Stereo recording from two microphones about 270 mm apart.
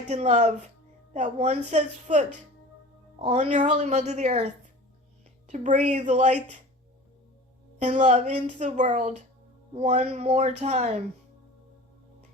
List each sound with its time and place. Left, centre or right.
0.1 s a woman's voice: right
5.5 s a woman's voice: right
7.8 s a woman's voice: right